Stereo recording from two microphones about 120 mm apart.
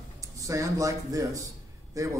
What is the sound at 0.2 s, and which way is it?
Speech, 25° right (ahead or behind).